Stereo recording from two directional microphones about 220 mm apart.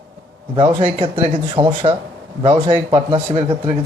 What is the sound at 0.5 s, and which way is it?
Speech, 20° right (ahead or behind).